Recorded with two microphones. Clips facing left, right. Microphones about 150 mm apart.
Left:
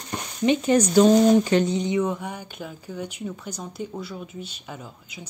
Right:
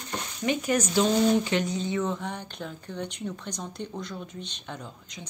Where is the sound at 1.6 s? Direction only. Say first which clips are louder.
Left 5 dB; 20° left (ahead or behind).